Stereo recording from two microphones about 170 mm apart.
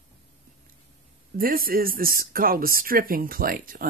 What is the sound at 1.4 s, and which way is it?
Speech, 60° right (ahead or behind).